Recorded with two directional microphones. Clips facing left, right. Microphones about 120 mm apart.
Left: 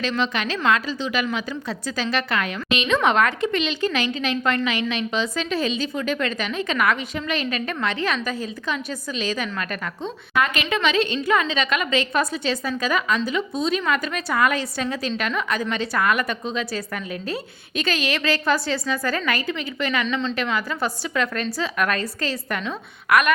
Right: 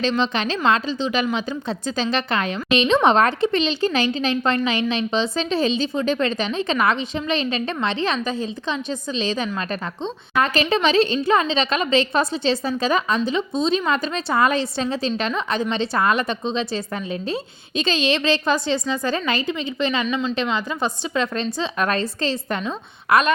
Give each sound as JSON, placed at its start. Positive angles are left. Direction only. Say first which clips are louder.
{"t": 0.0, "sound": "a woman's voice", "louder": "right 3 dB", "side_deg": -25}